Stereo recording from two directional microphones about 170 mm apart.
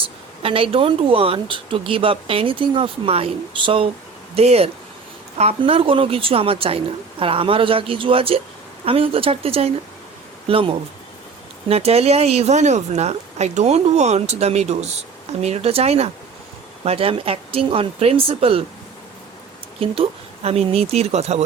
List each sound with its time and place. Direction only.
0.4 s a woman's voice: 35° right (ahead or behind)
19.8 s a woman's voice: 35° right (ahead or behind)